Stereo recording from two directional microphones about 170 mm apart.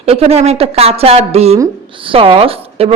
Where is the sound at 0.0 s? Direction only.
35° right (ahead or behind).